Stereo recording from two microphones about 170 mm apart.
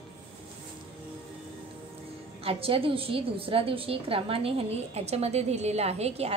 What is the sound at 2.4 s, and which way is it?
A woman's voice, 35° right (ahead or behind).